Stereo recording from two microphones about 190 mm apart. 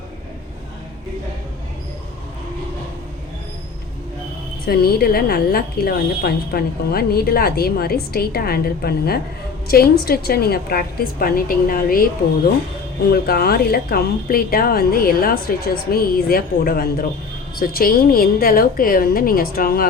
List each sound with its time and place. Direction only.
4.6 s speech: 55° left (ahead or behind)
13.1 s speech: 55° left (ahead or behind)